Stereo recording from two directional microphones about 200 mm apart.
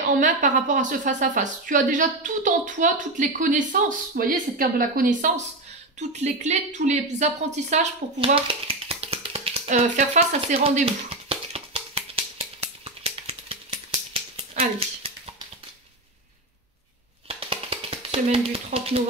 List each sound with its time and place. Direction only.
0.2 s a woman's voice: 40° right (ahead or behind)
5.9 s a sound: 35° right (ahead or behind)
17.3 s tap: 30° right (ahead or behind)